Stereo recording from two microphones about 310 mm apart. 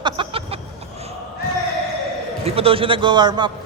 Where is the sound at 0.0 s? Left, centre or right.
Centre.